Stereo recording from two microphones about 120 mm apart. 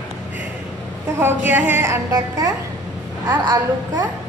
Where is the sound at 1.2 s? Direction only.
15° right (ahead or behind).